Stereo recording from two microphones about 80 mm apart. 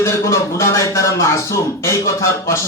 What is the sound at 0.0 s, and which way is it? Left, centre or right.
A man's voice, left.